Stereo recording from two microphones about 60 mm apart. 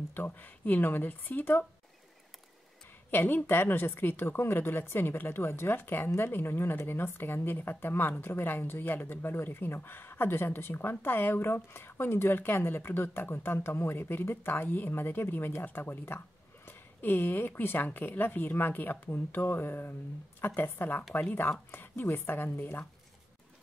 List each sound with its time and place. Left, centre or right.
0.1 s a woman's voice: left
3.1 s a woman's voice: left